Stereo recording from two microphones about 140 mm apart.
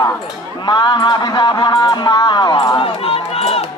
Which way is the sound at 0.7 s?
30° left (ahead or behind).